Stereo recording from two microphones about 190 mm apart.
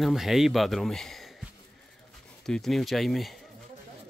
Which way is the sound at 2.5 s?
Centre (ahead or behind).